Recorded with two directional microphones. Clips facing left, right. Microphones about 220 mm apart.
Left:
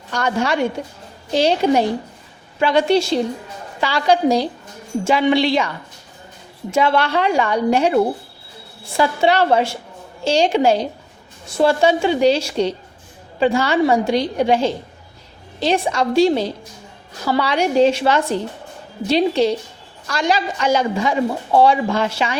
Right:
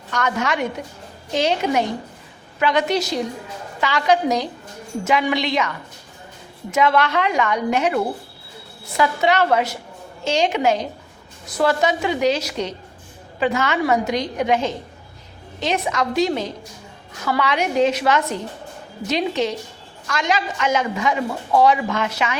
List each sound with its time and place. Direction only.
0.1 s a man's voice: 30° left (ahead or behind)